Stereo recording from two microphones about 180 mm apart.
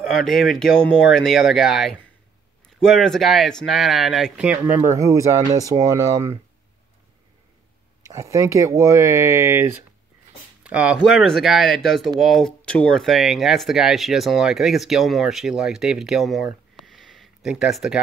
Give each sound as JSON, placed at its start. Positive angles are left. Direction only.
{"t": 0.1, "sound": "speech", "side_deg": 0}
{"t": 8.0, "sound": "speech", "side_deg": -15}